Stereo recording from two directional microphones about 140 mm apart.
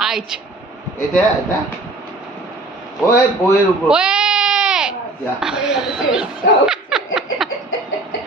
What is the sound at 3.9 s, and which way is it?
Sheep, 5° right (ahead or behind).